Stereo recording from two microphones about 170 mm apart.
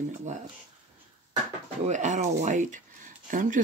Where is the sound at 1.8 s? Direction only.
45° right (ahead or behind).